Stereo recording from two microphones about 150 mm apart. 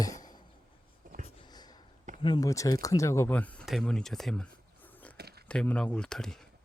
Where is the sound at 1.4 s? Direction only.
25° left (ahead or behind).